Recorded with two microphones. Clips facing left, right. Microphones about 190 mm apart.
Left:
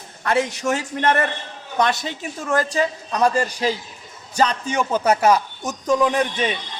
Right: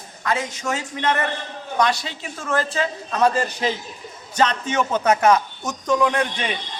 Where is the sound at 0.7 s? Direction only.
50° left (ahead or behind).